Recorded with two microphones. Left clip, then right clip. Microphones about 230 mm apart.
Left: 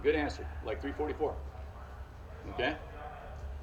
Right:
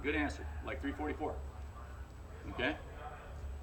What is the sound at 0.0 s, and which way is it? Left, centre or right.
Speech, centre.